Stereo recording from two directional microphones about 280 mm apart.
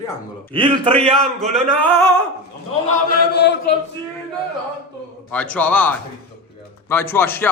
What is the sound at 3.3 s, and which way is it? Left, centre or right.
Speech, left.